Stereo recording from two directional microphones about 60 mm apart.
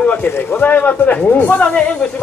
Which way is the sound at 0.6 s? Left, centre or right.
Left.